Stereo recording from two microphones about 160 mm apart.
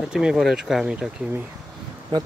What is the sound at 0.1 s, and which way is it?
Speech, 5° right (ahead or behind).